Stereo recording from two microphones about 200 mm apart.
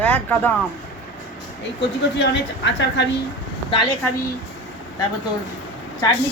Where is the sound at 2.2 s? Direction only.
60° left (ahead or behind).